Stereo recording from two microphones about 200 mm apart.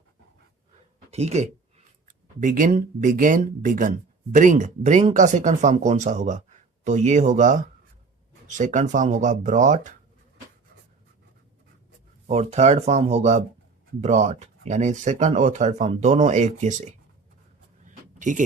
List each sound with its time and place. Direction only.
1.1 s speech: 35° right (ahead or behind)
12.3 s speech: 30° right (ahead or behind)
17.8 s a sound: 40° right (ahead or behind)